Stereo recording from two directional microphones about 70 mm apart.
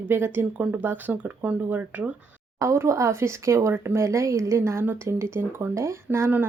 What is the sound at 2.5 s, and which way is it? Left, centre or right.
Speech, right.